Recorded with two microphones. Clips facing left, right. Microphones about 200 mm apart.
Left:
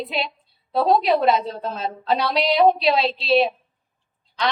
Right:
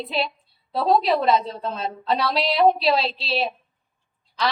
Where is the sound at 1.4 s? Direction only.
30° right (ahead or behind).